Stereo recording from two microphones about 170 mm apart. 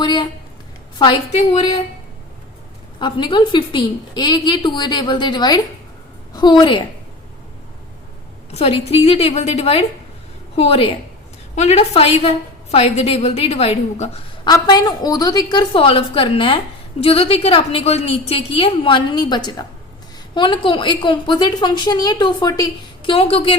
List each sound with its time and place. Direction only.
0.0 s a sound: 25° left (ahead or behind)
1.3 s a woman's voice: 45° left (ahead or behind)
3.0 s a woman's voice: 25° left (ahead or behind)
8.5 s a woman's voice: 35° left (ahead or behind)
14.4 s a woman's voice: 20° left (ahead or behind)